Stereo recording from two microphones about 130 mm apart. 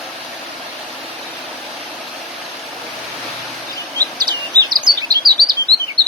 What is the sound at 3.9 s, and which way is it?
Chirp, 35° right (ahead or behind).